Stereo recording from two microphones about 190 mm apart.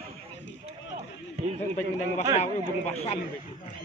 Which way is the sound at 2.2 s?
15° right (ahead or behind).